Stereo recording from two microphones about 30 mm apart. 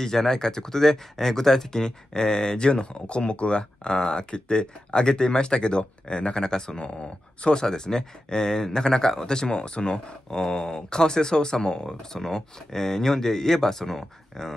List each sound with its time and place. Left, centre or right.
0.0 s speech: centre
6.8 s speech: left
7.6 s speech: left